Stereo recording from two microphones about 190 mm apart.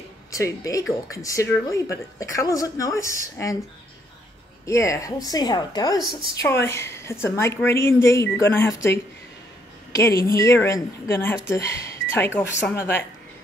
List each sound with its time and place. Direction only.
0.3 s speech: 15° left (ahead or behind)
4.6 s a woman's voice: 15° left (ahead or behind)